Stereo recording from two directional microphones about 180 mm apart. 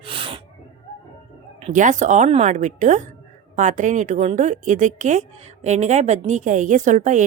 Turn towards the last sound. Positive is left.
turn(degrees=-45)  # may be behind; listen again after turning